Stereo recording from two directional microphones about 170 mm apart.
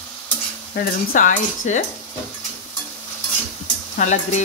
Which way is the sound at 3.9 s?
45° left (ahead or behind).